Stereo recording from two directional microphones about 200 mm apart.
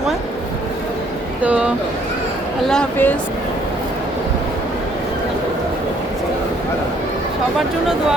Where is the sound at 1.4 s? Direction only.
5° right (ahead or behind).